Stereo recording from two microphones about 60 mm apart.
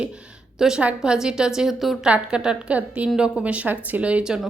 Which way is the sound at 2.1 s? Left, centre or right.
Centre.